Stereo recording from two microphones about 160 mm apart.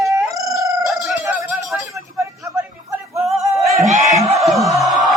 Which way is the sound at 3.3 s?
Centre (ahead or behind).